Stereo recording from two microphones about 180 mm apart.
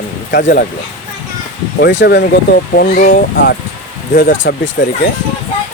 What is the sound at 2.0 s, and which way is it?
Speech, 70° left (ahead or behind).